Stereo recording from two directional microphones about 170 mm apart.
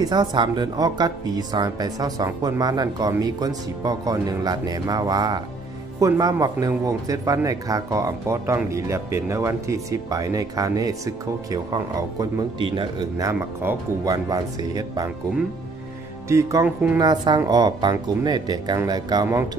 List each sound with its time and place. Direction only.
0.0 s speech: 25° right (ahead or behind)
13.3 s speech: 15° right (ahead or behind)
16.3 s music: 20° right (ahead or behind)
17.0 s speech: 25° right (ahead or behind)